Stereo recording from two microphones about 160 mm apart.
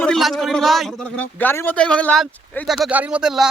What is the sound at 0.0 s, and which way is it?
Speech, centre (ahead or behind).